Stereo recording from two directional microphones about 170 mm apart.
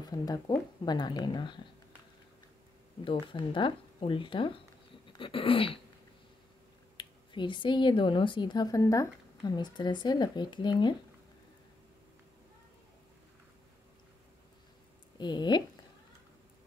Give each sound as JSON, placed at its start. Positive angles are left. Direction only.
{"t": 0.0, "sound": "speech", "side_deg": 20}
{"t": 3.0, "sound": "speech", "side_deg": 30}
{"t": 7.0, "sound": "speech", "side_deg": 30}
{"t": 15.1, "sound": "speech", "side_deg": 25}